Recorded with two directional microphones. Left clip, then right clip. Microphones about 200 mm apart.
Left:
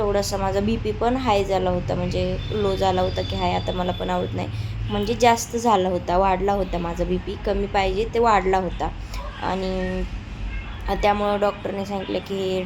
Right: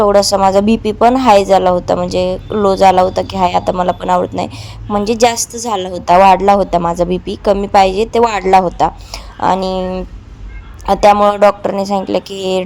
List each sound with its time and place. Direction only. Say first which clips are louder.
0.0 s a woman's voice: right 13 dB; 40° right (ahead or behind)